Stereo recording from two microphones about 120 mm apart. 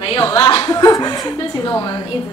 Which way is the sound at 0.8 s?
30° left (ahead or behind).